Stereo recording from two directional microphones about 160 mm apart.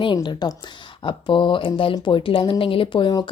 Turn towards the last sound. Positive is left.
turn(degrees=30)  # may be behind; listen again after turning